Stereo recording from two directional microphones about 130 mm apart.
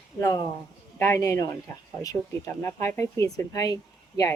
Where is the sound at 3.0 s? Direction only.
25° left (ahead or behind).